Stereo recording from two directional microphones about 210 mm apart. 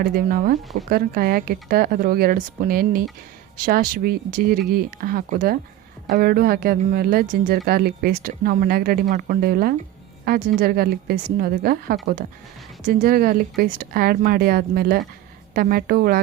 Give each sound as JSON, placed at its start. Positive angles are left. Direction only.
{"t": 0.0, "sound": "speech", "side_deg": -45}